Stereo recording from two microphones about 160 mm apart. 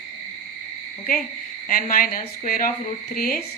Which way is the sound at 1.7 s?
60° left (ahead or behind).